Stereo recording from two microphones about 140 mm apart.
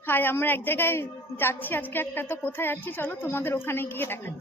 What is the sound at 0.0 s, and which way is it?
A woman's voice, 15° left (ahead or behind).